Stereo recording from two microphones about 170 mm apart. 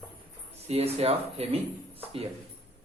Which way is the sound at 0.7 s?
40° right (ahead or behind).